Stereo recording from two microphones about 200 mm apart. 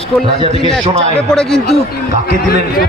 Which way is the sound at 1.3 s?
5° left (ahead or behind).